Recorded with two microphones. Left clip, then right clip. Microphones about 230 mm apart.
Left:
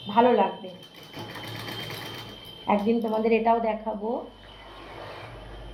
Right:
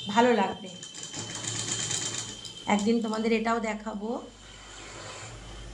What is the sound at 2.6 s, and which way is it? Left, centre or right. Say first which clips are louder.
A woman's voice: left 3 dB; right.